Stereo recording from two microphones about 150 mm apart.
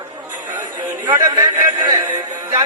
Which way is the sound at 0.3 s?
10° right (ahead or behind).